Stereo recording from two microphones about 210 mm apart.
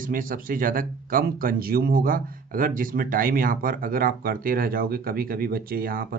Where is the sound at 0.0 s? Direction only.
40° right (ahead or behind).